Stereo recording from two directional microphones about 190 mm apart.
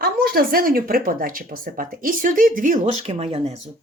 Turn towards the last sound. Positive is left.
turn(degrees=-35)  # may be behind; listen again after turning